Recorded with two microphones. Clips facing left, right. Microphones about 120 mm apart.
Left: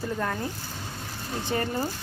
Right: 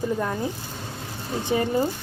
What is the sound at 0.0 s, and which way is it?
Speech, 10° right (ahead or behind).